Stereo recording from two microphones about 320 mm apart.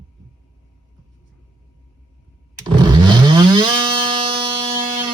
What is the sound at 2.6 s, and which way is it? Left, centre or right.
Chainsaw, centre.